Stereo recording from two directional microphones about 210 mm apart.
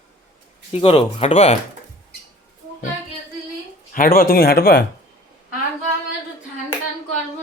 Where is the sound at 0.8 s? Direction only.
30° left (ahead or behind).